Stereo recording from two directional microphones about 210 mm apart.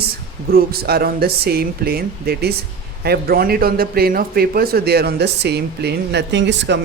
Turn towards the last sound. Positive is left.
turn(degrees=-55)  # may be behind; listen again after turning